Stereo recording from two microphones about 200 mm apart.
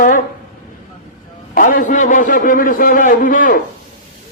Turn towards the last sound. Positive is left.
turn(degrees=45)  # may be behind; listen again after turning